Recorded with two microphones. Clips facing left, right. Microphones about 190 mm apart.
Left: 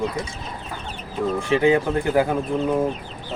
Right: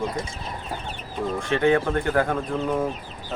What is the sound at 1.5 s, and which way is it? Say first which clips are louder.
Speech: left 2 dB; 10° left (ahead or behind).